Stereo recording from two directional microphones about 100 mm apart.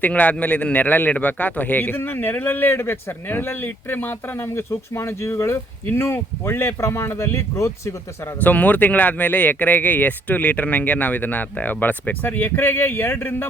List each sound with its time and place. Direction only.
0.0 s a man's voice: 15° left (ahead or behind); by 7.9 s 30° left (ahead or behind)
8.4 s speech: 15° left (ahead or behind)